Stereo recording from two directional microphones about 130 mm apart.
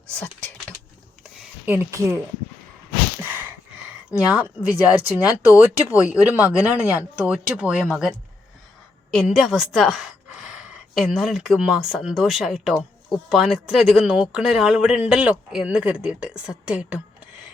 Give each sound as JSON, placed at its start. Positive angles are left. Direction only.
{"t": 1.6, "sound": "speech", "side_deg": -15}
{"t": 3.2, "sound": "a sound", "side_deg": -15}
{"t": 4.1, "sound": "speech", "side_deg": -10}
{"t": 9.1, "sound": "a woman's voice", "side_deg": 0}